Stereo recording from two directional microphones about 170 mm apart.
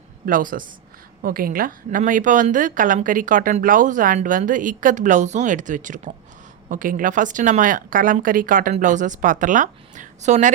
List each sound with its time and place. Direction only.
0.3 s a woman's voice: 55° right (ahead or behind)